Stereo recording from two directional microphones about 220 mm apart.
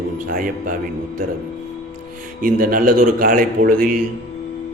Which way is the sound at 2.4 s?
40° right (ahead or behind).